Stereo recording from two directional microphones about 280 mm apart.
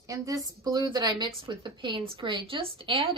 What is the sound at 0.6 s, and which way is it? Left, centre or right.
A woman's voice, centre.